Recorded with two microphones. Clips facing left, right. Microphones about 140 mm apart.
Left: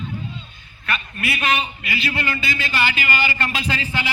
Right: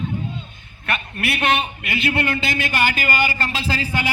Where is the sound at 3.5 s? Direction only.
30° right (ahead or behind).